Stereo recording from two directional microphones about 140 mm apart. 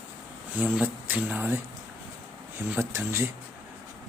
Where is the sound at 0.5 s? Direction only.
10° right (ahead or behind).